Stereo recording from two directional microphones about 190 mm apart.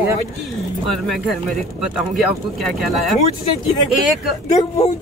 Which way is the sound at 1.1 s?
Centre (ahead or behind).